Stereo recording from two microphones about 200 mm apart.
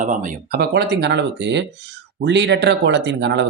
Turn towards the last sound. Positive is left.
turn(degrees=-60)  # may be behind; listen again after turning